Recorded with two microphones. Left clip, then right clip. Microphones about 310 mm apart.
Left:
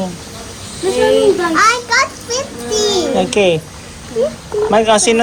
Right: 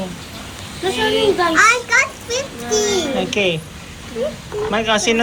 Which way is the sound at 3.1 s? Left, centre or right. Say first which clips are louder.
Left 6 dB; centre.